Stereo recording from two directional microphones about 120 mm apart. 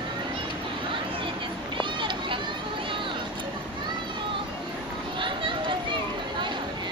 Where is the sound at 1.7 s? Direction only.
45° right (ahead or behind).